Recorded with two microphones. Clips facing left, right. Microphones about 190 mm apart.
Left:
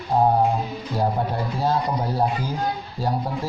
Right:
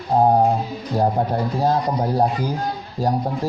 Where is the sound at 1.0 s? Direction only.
40° right (ahead or behind).